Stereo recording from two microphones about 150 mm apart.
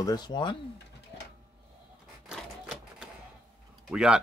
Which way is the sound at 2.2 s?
5° right (ahead or behind).